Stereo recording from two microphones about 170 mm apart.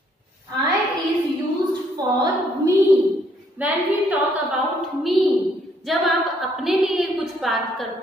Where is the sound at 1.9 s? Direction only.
25° right (ahead or behind).